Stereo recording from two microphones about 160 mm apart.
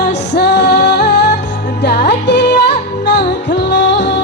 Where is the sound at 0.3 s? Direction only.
90° left.